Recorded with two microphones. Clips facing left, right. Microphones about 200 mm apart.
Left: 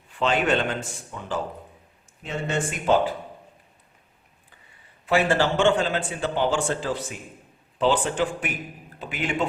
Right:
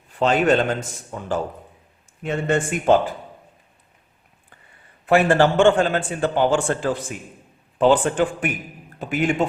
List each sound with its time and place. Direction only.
0.1 s a man's voice: 40° right (ahead or behind)
2.2 s a man's voice: 55° right (ahead or behind)
5.0 s a man's voice: 55° right (ahead or behind)